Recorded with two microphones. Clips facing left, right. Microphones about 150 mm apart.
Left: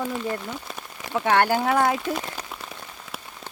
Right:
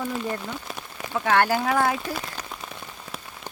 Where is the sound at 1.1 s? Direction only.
20° left (ahead or behind).